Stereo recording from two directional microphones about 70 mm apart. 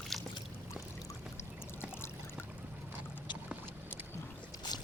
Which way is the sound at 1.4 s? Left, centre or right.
Left.